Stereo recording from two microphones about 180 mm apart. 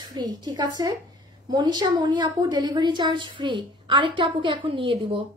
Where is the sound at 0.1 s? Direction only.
25° right (ahead or behind).